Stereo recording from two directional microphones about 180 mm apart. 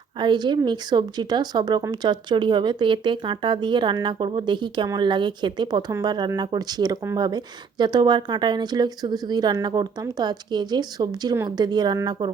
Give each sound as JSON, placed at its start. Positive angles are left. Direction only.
{"t": 0.2, "sound": "speech", "side_deg": -25}